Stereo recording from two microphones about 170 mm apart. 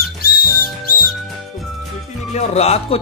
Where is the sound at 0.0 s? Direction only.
65° left (ahead or behind).